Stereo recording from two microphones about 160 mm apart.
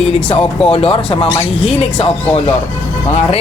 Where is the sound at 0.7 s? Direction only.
35° left (ahead or behind).